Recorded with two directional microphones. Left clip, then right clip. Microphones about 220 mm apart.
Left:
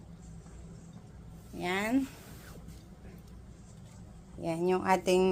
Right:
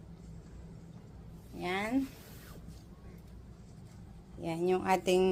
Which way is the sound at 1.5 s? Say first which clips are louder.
Left 3 dB; 15° left (ahead or behind).